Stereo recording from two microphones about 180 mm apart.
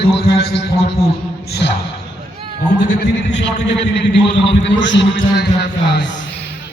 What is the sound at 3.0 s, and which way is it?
A man's voice, 75° left (ahead or behind).